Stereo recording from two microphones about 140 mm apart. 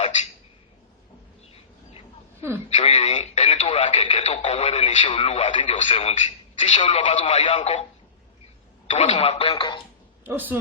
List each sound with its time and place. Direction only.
2.6 s speech: 50° left (ahead or behind)
4.2 s a man's voice: 50° left (ahead or behind)
8.9 s a man's voice: 40° left (ahead or behind)
10.2 s a man's voice: 15° right (ahead or behind)